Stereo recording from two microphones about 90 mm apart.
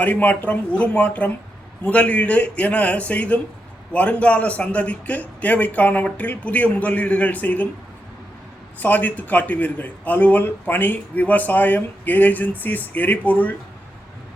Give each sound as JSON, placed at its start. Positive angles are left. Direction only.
{"t": 0.0, "sound": "a man's voice", "side_deg": 20}
{"t": 8.8, "sound": "speech", "side_deg": 20}